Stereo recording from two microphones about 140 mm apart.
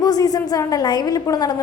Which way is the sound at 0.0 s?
30° left (ahead or behind).